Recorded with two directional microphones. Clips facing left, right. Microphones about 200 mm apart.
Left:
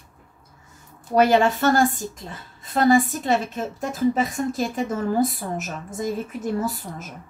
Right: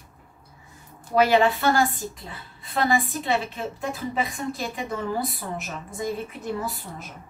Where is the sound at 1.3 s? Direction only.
45° left (ahead or behind).